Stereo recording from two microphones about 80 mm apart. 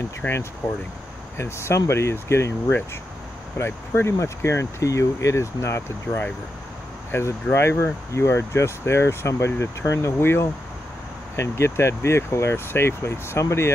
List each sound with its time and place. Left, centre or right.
0.2 s speech: centre
1.4 s speech: left